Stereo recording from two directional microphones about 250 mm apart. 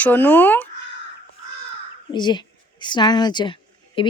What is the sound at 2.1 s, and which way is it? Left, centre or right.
Speech, centre.